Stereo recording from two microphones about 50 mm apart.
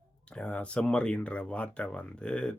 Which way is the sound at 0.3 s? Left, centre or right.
Left.